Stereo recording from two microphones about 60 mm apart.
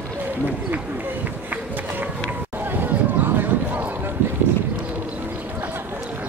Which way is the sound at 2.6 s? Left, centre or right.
Right.